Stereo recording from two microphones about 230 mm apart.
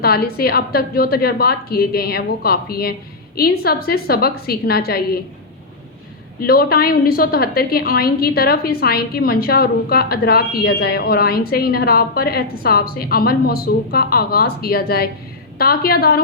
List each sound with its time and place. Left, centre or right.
0.0 s a woman's voice: left
6.4 s a woman's voice: left